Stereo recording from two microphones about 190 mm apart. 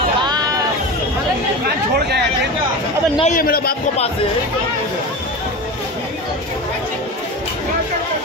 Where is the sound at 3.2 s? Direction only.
45° left (ahead or behind).